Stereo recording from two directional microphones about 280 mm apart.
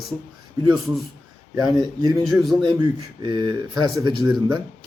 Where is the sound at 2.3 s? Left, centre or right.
Centre.